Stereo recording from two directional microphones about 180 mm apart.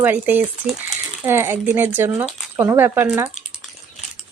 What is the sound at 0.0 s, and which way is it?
Speech, 10° right (ahead or behind).